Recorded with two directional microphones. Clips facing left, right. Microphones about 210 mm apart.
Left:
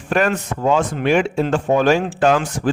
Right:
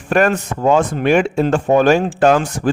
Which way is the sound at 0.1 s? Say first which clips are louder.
Right 3 dB; 45° right (ahead or behind).